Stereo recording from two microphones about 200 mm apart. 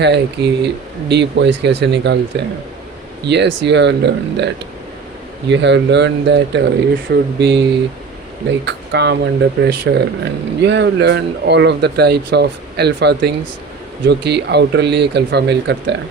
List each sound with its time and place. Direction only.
0.0 s speech: 60° right (ahead or behind)
8.6 s speech: 60° right (ahead or behind)